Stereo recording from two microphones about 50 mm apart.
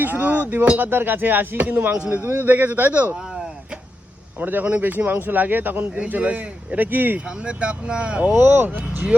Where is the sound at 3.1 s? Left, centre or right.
Centre.